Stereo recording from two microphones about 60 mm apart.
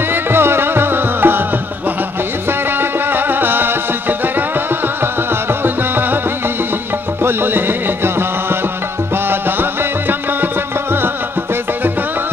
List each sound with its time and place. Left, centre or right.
0.1 s music: right
2.8 s music: right
5.6 s music: right
7.2 s music: right